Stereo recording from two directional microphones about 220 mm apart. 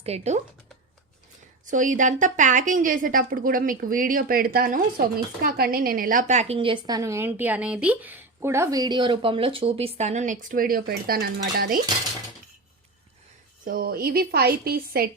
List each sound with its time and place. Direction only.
0.0 s speech: 30° right (ahead or behind)
1.6 s a woman's voice: 35° right (ahead or behind)
13.7 s a woman's voice: 40° right (ahead or behind)